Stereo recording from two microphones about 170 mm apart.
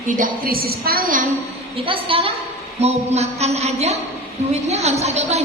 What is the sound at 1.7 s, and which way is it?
A woman's voice, 30° right (ahead or behind).